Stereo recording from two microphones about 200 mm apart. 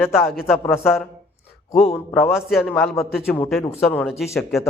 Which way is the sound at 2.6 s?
5° left (ahead or behind).